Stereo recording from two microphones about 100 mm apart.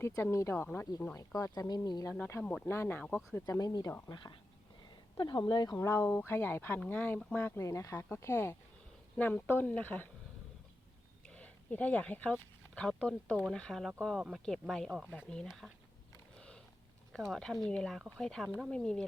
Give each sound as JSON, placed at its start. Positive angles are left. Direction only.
{"t": 0.2, "sound": "speech", "side_deg": 30}
{"t": 1.1, "sound": "speech", "side_deg": 35}
{"t": 2.4, "sound": "speech", "side_deg": 10}
{"t": 2.6, "sound": "speech", "side_deg": 20}
{"t": 3.6, "sound": "speech", "side_deg": 40}
{"t": 5.7, "sound": "speech", "side_deg": 20}
{"t": 7.7, "sound": "speech", "side_deg": 35}
{"t": 9.1, "sound": "speech", "side_deg": 15}
{"t": 11.3, "sound": "speech", "side_deg": 15}
{"t": 14.8, "sound": "speech", "side_deg": -10}
{"t": 15.4, "sound": "speech", "side_deg": 0}
{"t": 17.3, "sound": "speech", "side_deg": 5}